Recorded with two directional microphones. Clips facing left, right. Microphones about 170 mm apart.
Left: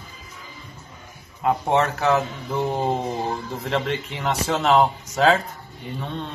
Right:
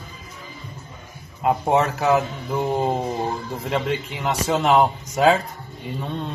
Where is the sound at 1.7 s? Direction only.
Centre (ahead or behind).